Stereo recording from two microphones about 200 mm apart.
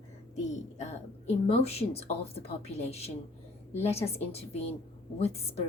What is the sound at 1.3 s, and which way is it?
A woman's voice, 30° left (ahead or behind).